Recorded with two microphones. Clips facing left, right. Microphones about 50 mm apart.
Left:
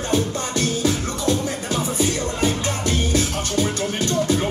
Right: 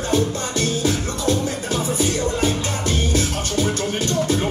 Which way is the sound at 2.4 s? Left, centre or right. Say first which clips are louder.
Even; left.